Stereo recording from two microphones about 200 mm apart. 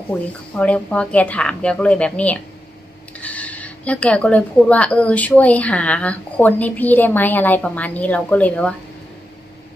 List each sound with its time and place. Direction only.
0.6 s speech: 5° left (ahead or behind)